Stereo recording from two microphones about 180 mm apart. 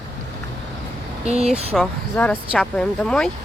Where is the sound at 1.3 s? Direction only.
35° right (ahead or behind).